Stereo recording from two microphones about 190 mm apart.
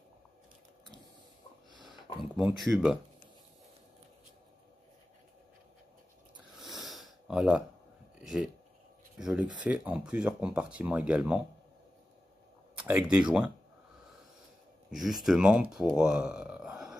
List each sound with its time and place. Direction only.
1.8 s a sound: centre (ahead or behind)
2.3 s speech: centre (ahead or behind)
6.6 s sniff: centre (ahead or behind)
8.2 s speech: centre (ahead or behind)
12.7 s speech: 10° right (ahead or behind)
14.9 s speech: centre (ahead or behind)